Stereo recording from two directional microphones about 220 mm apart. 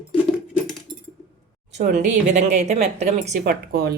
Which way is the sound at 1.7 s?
35° right (ahead or behind).